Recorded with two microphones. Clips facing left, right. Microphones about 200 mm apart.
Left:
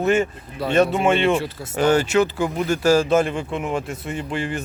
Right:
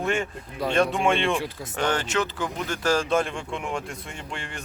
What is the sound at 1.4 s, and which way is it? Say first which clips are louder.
Speech: left 3 dB; 15° right (ahead or behind).